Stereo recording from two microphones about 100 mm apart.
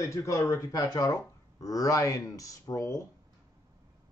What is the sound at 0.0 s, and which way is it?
A man's voice, 30° left (ahead or behind).